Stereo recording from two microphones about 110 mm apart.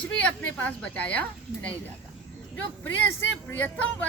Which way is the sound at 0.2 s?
10° left (ahead or behind).